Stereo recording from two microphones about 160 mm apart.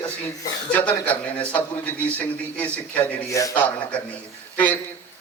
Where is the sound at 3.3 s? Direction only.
20° left (ahead or behind).